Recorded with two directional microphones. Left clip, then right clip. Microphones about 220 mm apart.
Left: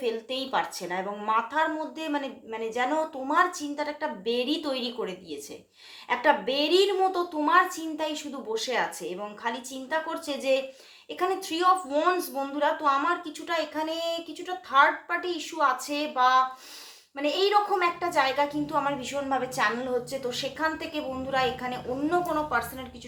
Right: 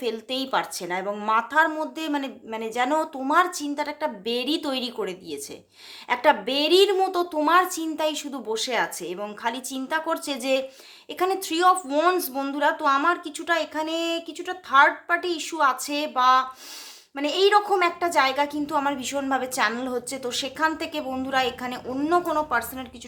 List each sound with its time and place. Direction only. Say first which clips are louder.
0.0 s a woman's voice: right 2 dB; 45° right (ahead or behind)